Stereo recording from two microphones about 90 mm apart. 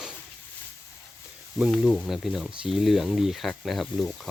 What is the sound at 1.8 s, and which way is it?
Speech, 15° right (ahead or behind).